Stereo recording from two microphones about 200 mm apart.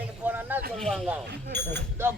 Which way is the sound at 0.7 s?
Centre (ahead or behind).